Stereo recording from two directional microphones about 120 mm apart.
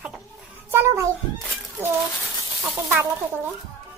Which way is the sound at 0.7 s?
20° right (ahead or behind).